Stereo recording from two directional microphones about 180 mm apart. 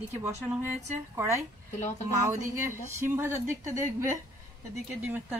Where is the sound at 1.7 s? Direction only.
40° left (ahead or behind).